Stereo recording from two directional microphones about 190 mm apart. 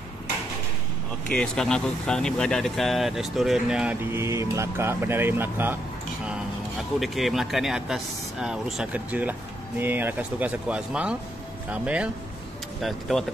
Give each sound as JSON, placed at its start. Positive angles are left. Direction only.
{"t": 1.3, "sound": "speech", "side_deg": 5}
{"t": 7.0, "sound": "speech", "side_deg": 0}